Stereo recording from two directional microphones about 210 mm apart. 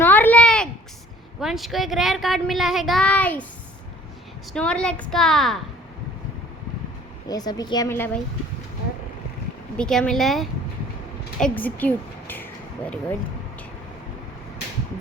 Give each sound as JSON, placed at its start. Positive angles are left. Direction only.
{"t": 0.0, "sound": "a sound", "side_deg": 10}
{"t": 1.4, "sound": "a child's voice", "side_deg": 0}
{"t": 4.5, "sound": "a child's voice", "side_deg": 5}
{"t": 7.3, "sound": "speech", "side_deg": 20}
{"t": 9.7, "sound": "a child's voice", "side_deg": 5}